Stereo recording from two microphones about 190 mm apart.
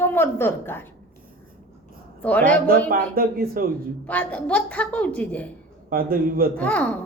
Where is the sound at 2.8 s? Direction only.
50° right (ahead or behind).